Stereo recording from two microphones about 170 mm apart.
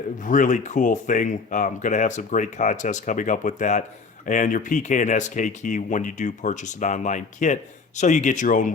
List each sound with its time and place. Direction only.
0.2 s speech: 50° left (ahead or behind)